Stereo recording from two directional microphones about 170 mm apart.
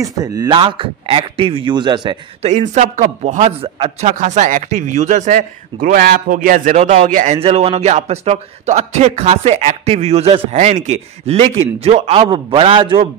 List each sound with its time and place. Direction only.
0.0 s a man's voice: 20° right (ahead or behind)
2.4 s a man's voice: 45° right (ahead or behind)
3.6 s speech: 35° right (ahead or behind)